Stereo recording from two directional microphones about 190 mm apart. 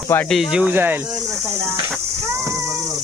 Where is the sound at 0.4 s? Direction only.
5° right (ahead or behind).